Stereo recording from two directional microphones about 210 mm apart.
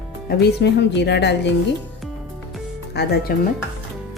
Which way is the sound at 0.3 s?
55° left (ahead or behind).